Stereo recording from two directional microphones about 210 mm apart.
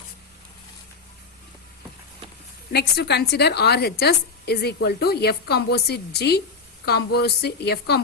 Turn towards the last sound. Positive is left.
turn(degrees=50)  # may be behind; listen again after turning